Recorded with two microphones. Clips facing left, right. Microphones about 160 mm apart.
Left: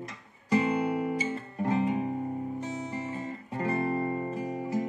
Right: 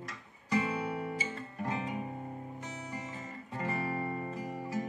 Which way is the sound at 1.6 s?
30° left (ahead or behind).